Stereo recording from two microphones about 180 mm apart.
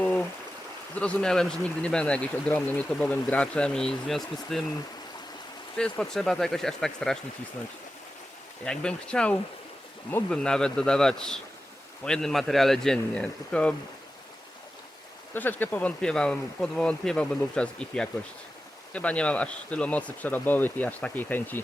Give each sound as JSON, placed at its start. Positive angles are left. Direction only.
{"t": 0.0, "sound": "stream", "side_deg": 10}
{"t": 0.9, "sound": "speech", "side_deg": 5}
{"t": 5.7, "sound": "speech", "side_deg": 5}
{"t": 8.6, "sound": "speech", "side_deg": 5}
{"t": 15.3, "sound": "speech", "side_deg": 10}